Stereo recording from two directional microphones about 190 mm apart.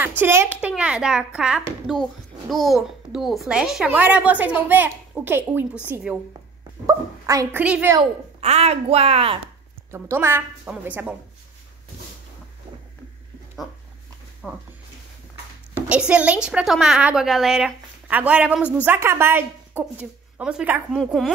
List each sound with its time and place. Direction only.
0.2 s a woman's voice: 10° right (ahead or behind)
7.6 s speech: 5° right (ahead or behind)
8.4 s a woman's voice: 35° right (ahead or behind)
9.8 s speech: 15° right (ahead or behind)
14.4 s a woman's voice: 5° left (ahead or behind)
15.7 s a woman's voice: 5° right (ahead or behind)